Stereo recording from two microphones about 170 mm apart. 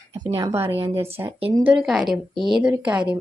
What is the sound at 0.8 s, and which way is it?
Speech, 35° right (ahead or behind).